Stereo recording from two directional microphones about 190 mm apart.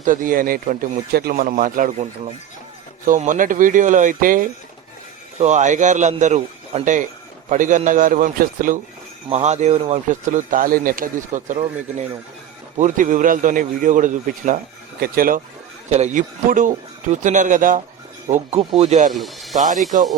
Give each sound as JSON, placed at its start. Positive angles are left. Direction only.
{"t": 0.0, "sound": "a man's voice", "side_deg": -45}
{"t": 12.7, "sound": "speech", "side_deg": -40}
{"t": 15.9, "sound": "a man's voice", "side_deg": -35}
{"t": 19.1, "sound": "speech", "side_deg": 0}
{"t": 19.5, "sound": "a man's voice", "side_deg": -40}